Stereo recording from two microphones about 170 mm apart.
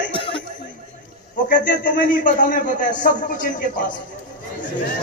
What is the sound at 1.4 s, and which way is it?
A man's voice, 50° left (ahead or behind).